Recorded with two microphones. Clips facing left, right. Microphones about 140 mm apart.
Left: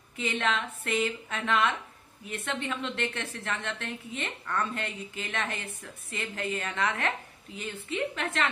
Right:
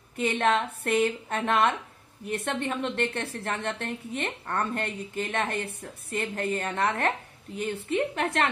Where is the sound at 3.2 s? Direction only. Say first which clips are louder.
Right 4 dB; 35° right (ahead or behind).